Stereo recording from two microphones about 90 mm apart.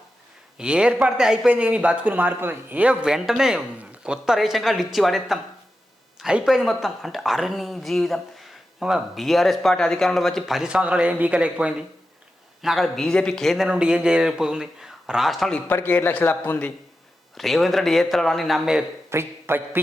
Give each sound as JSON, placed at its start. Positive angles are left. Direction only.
{"t": 0.6, "sound": "speech", "side_deg": -10}
{"t": 12.6, "sound": "speech", "side_deg": 0}
{"t": 13.7, "sound": "speech", "side_deg": -10}
{"t": 15.6, "sound": "a man's voice", "side_deg": 25}
{"t": 17.3, "sound": "speech", "side_deg": 0}
{"t": 19.1, "sound": "a man's voice", "side_deg": -25}